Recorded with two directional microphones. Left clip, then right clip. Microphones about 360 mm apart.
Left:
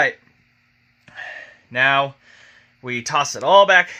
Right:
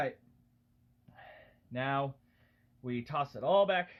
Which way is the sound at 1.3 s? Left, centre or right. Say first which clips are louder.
Left 15 dB; centre.